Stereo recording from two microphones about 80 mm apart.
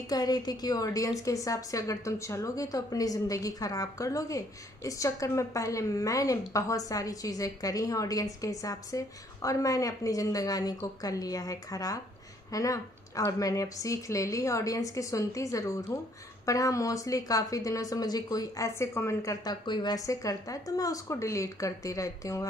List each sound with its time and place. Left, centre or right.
0.1 s a woman's voice: left
18.8 s a woman's voice: left
19.4 s speech: left
20.0 s a woman's voice: left